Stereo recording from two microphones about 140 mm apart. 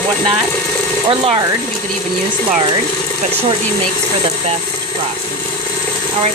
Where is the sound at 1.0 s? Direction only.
45° right (ahead or behind).